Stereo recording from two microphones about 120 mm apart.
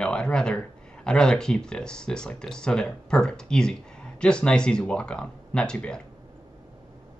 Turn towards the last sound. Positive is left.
turn(degrees=5)  # may be behind; listen again after turning